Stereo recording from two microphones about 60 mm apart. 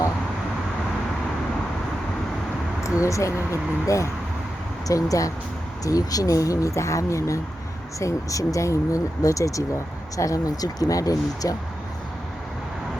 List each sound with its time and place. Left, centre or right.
3.0 s speech: left
4.9 s speech: left
5.8 s speech: left